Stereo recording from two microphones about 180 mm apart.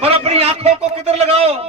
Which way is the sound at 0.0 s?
35° right (ahead or behind).